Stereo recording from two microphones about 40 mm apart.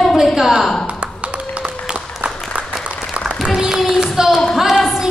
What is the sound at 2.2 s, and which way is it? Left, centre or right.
Applause, right.